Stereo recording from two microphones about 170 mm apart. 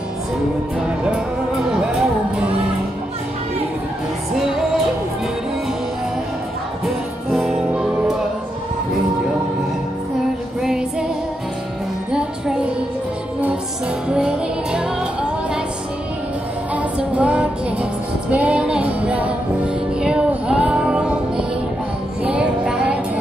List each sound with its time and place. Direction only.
0.7 s music: 5° right (ahead or behind)
4.4 s music: centre (ahead or behind)
7.2 s music: 5° right (ahead or behind)
10.6 s music: centre (ahead or behind)
12.1 s music: 5° right (ahead or behind)
14.0 s music: 5° right (ahead or behind)
16.7 s music: 5° right (ahead or behind)